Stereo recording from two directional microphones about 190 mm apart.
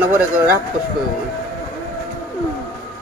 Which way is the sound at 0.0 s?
15° right (ahead or behind).